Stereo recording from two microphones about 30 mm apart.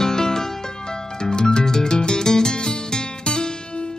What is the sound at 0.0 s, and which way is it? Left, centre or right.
Music, centre.